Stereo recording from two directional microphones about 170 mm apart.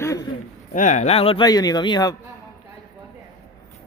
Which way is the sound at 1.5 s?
25° left (ahead or behind).